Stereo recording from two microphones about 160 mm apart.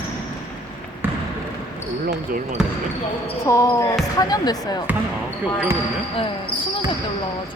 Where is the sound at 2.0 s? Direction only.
50° right (ahead or behind).